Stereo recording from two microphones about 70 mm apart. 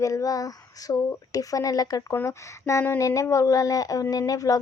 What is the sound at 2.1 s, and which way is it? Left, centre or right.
A woman's voice, left.